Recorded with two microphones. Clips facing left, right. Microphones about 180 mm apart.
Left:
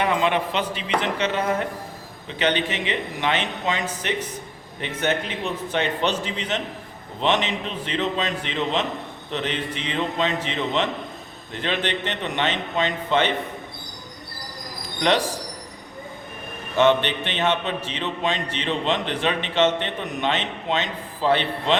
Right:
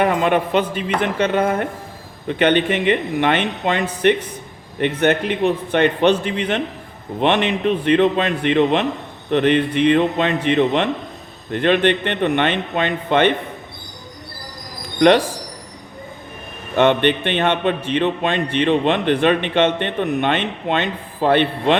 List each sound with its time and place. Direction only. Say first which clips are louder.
0.0 s a man's voice: right 5 dB; 50° right (ahead or behind)
16.7 s a man's voice: right 4 dB; 60° right (ahead or behind)